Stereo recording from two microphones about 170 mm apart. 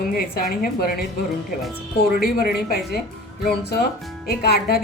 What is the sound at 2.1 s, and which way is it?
A woman's voice, 65° left (ahead or behind).